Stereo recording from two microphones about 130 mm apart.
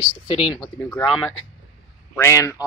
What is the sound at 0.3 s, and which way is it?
Speech, 45° left (ahead or behind).